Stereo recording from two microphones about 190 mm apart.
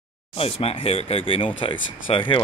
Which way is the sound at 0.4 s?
30° left (ahead or behind).